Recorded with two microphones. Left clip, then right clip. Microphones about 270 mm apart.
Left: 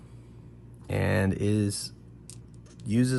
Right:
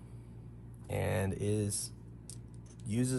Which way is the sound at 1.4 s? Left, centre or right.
Left.